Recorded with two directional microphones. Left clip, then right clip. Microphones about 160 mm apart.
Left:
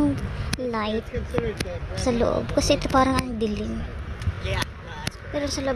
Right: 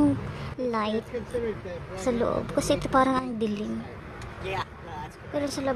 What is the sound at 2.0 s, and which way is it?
A woman's voice, 5° left (ahead or behind).